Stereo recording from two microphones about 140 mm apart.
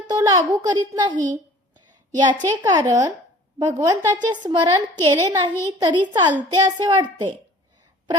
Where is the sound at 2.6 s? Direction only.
25° right (ahead or behind).